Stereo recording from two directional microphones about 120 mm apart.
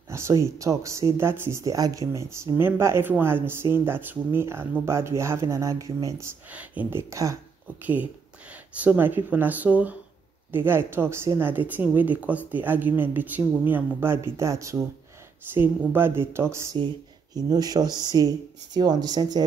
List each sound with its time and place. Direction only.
0.1 s speech: 25° right (ahead or behind)
6.5 s speech: 10° right (ahead or behind)
7.8 s speech: 15° right (ahead or behind)
17.3 s speech: 30° right (ahead or behind)